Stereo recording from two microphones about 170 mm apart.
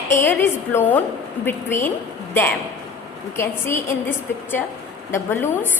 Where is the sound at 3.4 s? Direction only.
15° left (ahead or behind).